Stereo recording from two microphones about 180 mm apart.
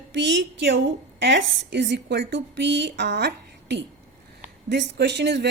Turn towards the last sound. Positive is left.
turn(degrees=-70)  # may be behind; listen again after turning